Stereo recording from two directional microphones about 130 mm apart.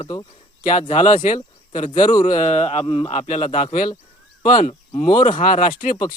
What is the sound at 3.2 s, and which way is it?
Speech, 65° left (ahead or behind).